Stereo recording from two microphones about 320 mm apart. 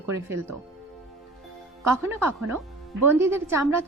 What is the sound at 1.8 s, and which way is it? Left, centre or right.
A woman's voice, centre.